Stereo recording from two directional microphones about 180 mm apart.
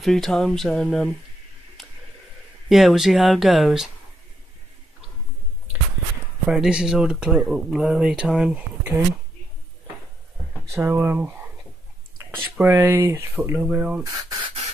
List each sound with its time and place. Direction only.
0.0 s speech: centre (ahead or behind)
1.8 s a sound: centre (ahead or behind)
2.7 s speech: centre (ahead or behind)
6.5 s speech: 5° right (ahead or behind)
10.7 s speech: 15° right (ahead or behind)